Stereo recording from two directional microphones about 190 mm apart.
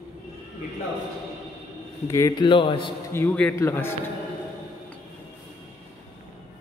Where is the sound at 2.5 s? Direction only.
25° left (ahead or behind).